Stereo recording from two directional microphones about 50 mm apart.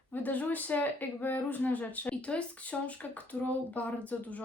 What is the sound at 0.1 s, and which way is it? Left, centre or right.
Speech, left.